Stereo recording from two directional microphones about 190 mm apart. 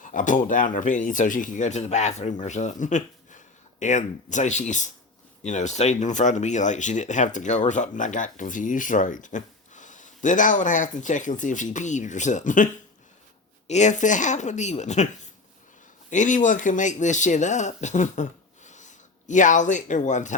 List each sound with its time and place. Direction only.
0.0 s speech: 45° left (ahead or behind)